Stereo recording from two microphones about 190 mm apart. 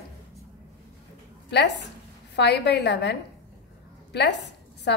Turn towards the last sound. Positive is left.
turn(degrees=65)  # may be behind; listen again after turning